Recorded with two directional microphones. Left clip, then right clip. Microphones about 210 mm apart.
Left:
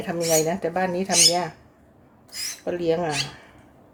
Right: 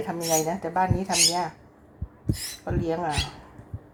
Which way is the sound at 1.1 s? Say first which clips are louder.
Left 7 dB; centre (ahead or behind).